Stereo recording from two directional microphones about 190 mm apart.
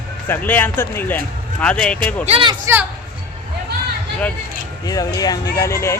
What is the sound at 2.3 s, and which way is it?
Speech, 25° right (ahead or behind).